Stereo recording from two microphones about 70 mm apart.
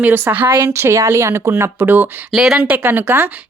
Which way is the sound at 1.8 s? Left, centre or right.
Right.